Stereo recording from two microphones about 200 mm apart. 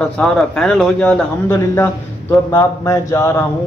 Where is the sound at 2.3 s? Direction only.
15° left (ahead or behind).